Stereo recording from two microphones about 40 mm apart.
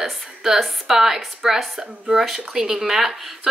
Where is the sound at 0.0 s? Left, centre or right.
Centre.